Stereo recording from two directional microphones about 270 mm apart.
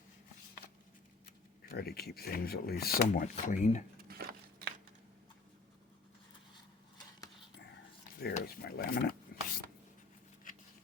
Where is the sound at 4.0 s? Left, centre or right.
Right.